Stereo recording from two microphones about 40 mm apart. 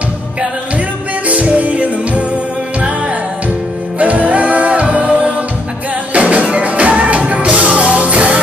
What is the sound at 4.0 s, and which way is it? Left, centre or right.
Music, right.